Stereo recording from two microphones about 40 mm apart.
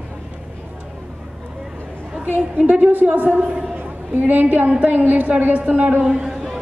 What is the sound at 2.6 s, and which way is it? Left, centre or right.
Speech, right.